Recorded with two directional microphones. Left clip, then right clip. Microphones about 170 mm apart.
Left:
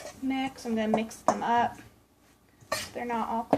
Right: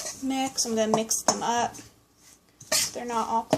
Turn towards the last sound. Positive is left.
turn(degrees=-35)  # may be behind; listen again after turning